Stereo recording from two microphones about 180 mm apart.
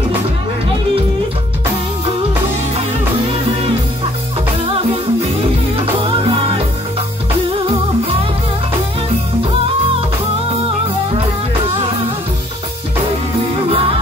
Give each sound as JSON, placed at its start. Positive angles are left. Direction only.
{"t": 5.8, "sound": "music", "side_deg": -30}
{"t": 13.7, "sound": "music", "side_deg": -30}